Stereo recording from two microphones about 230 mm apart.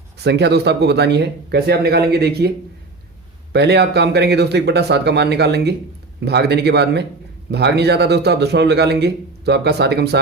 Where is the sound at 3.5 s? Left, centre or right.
Right.